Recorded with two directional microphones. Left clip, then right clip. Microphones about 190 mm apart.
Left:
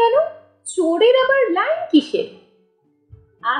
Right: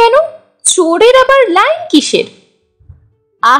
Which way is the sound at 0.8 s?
35° right (ahead or behind).